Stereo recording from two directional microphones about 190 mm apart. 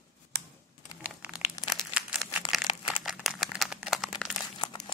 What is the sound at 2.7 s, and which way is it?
Crumpling, 25° left (ahead or behind).